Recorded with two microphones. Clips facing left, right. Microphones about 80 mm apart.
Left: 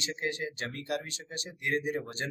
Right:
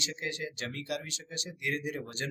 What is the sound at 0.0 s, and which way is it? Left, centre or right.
Speech, left.